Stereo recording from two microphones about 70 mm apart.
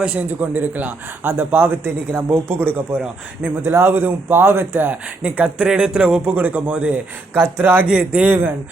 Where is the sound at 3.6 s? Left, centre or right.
Right; by 8.3 s centre.